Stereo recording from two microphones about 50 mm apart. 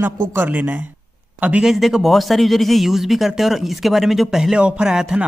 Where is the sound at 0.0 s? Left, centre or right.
Right.